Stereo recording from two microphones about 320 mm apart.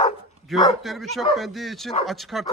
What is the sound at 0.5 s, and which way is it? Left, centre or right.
Speech, centre.